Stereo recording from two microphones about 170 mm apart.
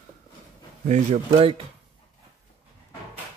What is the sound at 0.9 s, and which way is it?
Speech, 40° right (ahead or behind).